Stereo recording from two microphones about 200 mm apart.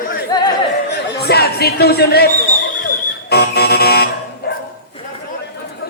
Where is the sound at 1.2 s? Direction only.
55° left (ahead or behind).